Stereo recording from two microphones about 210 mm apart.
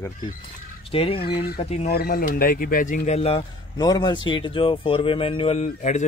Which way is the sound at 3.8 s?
20° left (ahead or behind).